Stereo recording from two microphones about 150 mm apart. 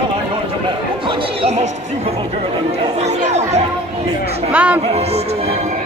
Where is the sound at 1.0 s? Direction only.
45° right (ahead or behind).